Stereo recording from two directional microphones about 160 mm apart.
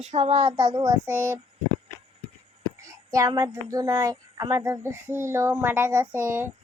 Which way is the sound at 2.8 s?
20° right (ahead or behind).